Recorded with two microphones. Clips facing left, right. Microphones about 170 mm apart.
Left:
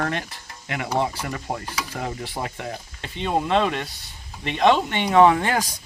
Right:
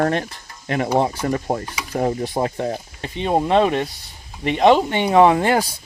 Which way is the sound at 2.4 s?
25° right (ahead or behind).